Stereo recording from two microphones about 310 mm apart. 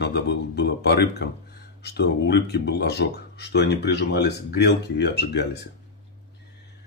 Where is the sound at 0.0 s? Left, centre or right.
Left.